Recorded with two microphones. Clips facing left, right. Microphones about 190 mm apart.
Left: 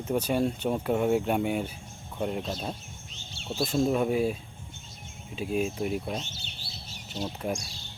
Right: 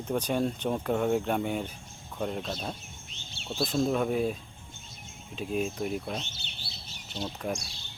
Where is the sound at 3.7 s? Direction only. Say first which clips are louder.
Left 2 dB; 5° left (ahead or behind).